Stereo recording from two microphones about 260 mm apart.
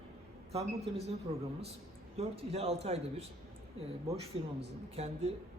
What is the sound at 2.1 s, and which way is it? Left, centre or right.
A woman's voice, right.